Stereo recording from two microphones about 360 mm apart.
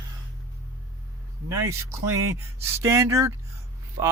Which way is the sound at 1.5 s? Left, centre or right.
Centre.